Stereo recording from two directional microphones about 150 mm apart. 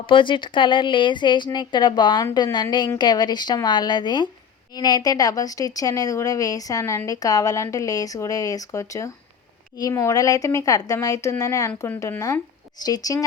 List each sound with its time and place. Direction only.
0.0 s a woman's voice: 35° left (ahead or behind)